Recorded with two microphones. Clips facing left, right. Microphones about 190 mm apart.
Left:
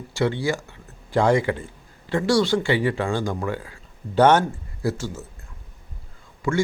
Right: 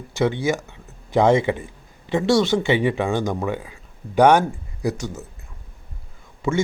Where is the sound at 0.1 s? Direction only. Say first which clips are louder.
Right 2 dB; 20° right (ahead or behind).